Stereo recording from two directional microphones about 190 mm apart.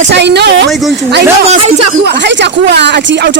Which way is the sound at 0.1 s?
65° right (ahead or behind).